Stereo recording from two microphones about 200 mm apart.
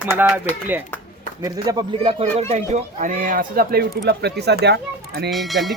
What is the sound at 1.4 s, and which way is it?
Speech, 20° right (ahead or behind).